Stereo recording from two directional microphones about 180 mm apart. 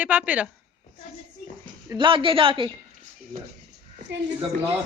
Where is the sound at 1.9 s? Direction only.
30° right (ahead or behind).